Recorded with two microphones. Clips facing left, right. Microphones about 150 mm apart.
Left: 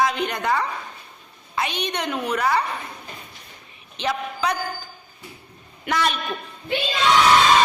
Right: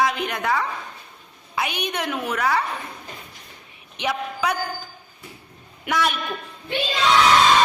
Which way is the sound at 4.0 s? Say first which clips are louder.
Even; 10° right (ahead or behind).